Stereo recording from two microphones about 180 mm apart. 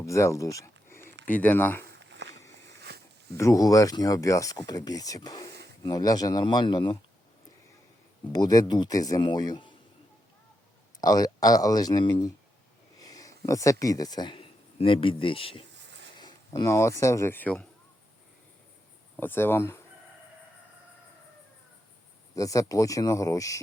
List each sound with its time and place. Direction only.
0.0 s speech: 15° left (ahead or behind)
1.8 s a sound: 80° right
2.9 s a sound: 65° right (ahead or behind)
3.3 s speech: 15° left (ahead or behind)
8.3 s speech: 20° left (ahead or behind)
11.0 s speech: 20° left (ahead or behind)
19.1 s speech: 10° left (ahead or behind)
22.4 s speech: 20° left (ahead or behind)